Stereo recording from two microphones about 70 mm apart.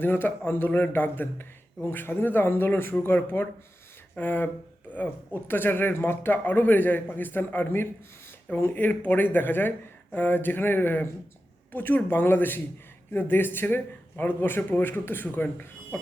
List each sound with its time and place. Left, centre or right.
0.0 s a man's voice: left